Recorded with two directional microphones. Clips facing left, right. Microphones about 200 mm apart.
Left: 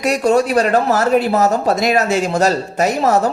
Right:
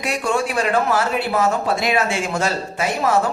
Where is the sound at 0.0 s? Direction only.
40° left (ahead or behind).